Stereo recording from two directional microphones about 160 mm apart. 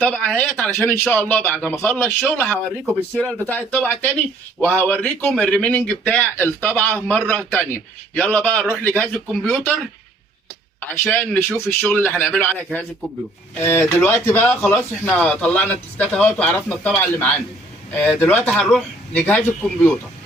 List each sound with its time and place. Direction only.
0.0 s a man's voice: 5° left (ahead or behind)
10.8 s a man's voice: 10° left (ahead or behind)